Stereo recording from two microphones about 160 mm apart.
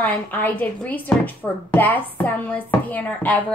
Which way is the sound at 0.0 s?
10° left (ahead or behind).